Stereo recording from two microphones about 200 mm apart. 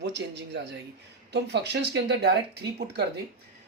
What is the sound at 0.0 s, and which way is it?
Speech, 60° right (ahead or behind).